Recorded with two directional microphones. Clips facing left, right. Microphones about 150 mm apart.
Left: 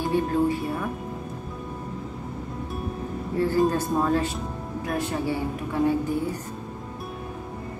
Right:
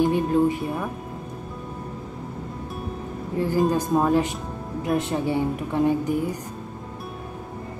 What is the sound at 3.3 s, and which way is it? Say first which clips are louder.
Speech: even; 15° right (ahead or behind).